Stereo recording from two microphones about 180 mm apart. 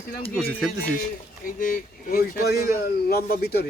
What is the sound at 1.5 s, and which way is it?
A man's voice, 50° left (ahead or behind).